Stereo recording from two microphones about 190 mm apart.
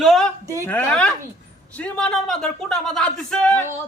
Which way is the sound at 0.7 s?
5° left (ahead or behind).